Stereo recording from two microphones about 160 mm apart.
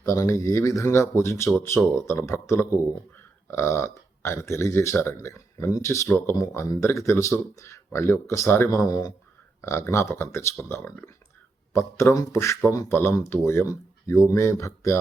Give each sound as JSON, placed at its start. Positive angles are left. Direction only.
{"t": 0.0, "sound": "speech", "side_deg": 20}